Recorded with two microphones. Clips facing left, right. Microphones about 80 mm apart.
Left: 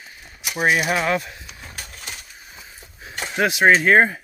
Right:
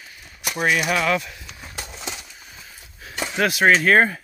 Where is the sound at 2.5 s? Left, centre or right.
Centre.